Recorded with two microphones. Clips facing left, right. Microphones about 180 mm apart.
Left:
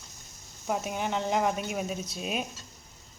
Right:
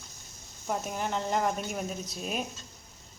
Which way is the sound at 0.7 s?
Centre (ahead or behind).